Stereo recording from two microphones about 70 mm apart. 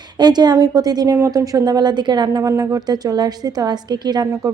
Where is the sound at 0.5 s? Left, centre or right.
Right.